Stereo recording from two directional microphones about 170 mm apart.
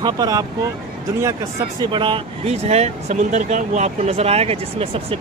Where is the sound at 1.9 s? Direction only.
30° right (ahead or behind).